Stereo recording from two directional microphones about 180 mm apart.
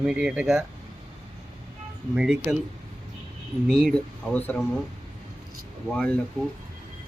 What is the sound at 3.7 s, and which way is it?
Speech, centre (ahead or behind).